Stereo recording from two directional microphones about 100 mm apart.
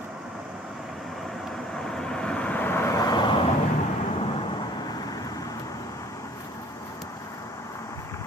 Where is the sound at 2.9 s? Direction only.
40° left (ahead or behind).